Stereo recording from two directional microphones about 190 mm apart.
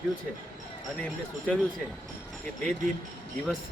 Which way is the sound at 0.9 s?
5° left (ahead or behind).